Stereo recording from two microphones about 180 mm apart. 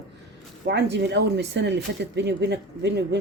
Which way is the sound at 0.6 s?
70° right (ahead or behind).